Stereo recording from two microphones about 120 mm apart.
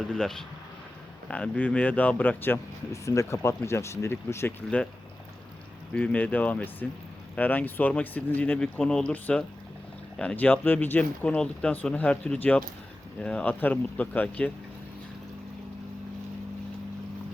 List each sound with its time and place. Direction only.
0.1 s speech: 5° left (ahead or behind); by 4.5 s 20° left (ahead or behind)
5.9 s speech: 10° left (ahead or behind)